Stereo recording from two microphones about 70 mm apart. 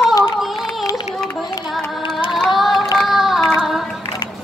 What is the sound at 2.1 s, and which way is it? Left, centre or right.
Music, centre.